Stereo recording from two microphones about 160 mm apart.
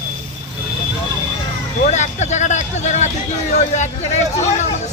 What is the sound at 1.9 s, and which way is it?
Speech, 45° left (ahead or behind).